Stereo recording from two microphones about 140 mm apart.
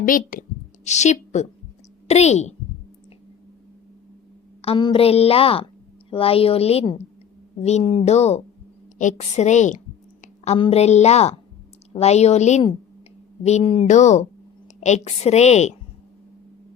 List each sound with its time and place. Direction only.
0.0 s speech: 80° left
0.9 s a woman's voice: 55° left (ahead or behind)
4.6 s a woman's voice: 40° left (ahead or behind); by 9.8 s 60° left (ahead or behind)
10.6 s a woman's voice: 50° left (ahead or behind)
13.8 s a woman's voice: 60° left (ahead or behind)